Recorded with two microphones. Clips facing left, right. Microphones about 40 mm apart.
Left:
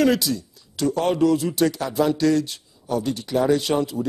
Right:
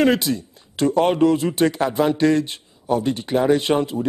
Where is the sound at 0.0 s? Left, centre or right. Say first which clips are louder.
Right 2 dB; right.